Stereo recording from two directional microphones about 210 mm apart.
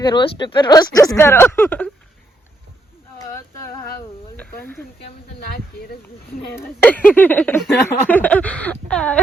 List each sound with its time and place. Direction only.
0.0 s speech: 20° left (ahead or behind)
4.4 s speech: 10° left (ahead or behind)
6.5 s speech: 10° left (ahead or behind)